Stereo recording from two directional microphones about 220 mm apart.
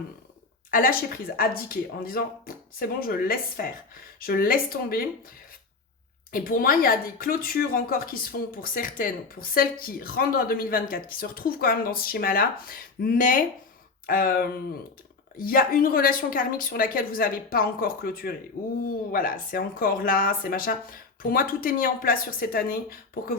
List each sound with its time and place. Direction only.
0.7 s speech: 40° left (ahead or behind)
6.3 s speech: 40° left (ahead or behind)